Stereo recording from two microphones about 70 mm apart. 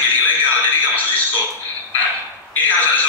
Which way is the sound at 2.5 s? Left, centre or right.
Left.